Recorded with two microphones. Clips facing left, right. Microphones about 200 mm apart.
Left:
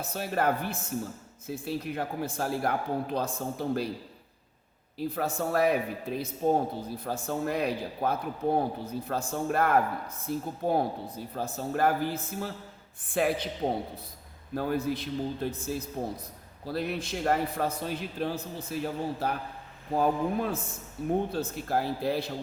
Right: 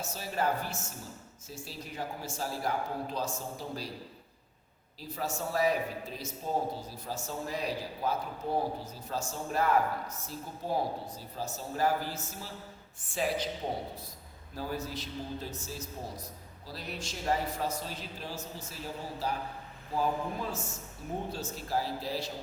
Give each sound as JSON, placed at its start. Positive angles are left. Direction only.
{"t": 0.0, "sound": "speech", "side_deg": 60}
{"t": 4.9, "sound": "speech", "side_deg": 55}
{"t": 14.5, "sound": "speech", "side_deg": 60}